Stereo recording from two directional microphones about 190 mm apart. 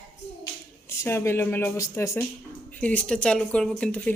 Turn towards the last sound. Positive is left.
turn(degrees=5)  # may be behind; listen again after turning